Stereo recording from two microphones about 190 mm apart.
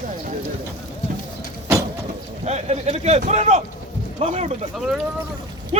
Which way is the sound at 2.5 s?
35° right (ahead or behind).